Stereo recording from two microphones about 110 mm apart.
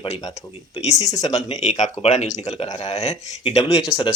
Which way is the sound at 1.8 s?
80° left.